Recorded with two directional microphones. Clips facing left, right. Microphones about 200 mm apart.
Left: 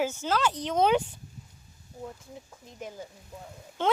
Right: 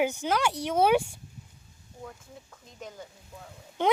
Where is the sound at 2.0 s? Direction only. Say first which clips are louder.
Left 3 dB; 20° left (ahead or behind).